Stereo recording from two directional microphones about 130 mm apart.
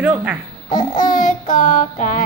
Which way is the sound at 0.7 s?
80° left.